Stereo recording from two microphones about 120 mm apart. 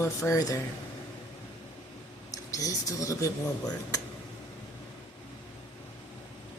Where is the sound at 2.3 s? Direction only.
30° left (ahead or behind).